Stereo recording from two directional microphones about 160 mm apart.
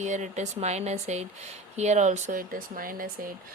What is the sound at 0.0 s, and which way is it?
Speech, 50° right (ahead or behind).